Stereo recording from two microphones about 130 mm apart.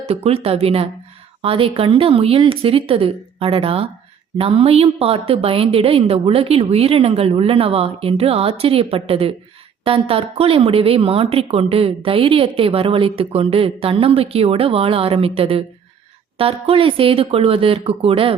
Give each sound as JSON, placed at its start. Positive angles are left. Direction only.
{"t": 0.1, "sound": "a woman's voice", "side_deg": -50}